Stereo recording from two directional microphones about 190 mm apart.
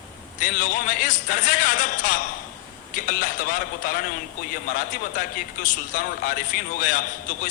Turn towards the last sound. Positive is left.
turn(degrees=45)  # may be behind; listen again after turning